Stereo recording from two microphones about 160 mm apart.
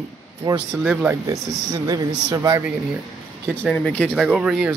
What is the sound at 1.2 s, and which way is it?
Speech, 20° right (ahead or behind).